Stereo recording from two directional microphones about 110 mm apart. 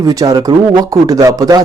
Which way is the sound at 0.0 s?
35° right (ahead or behind).